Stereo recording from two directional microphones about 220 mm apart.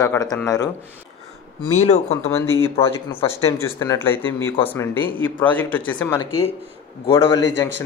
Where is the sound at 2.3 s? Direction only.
10° left (ahead or behind).